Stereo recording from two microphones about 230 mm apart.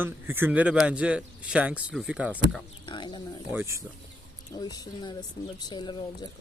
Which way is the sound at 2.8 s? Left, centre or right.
Left.